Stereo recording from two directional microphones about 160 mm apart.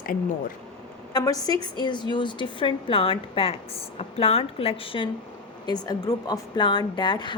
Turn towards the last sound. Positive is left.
turn(degrees=30)  # may be behind; listen again after turning